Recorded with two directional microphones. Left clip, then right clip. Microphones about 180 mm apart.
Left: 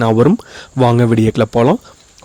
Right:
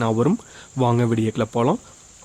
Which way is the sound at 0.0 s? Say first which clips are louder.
Left 9 dB; 35° left (ahead or behind).